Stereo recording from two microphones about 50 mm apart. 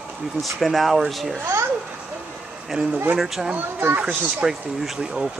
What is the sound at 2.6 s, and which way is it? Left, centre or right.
Speech, centre.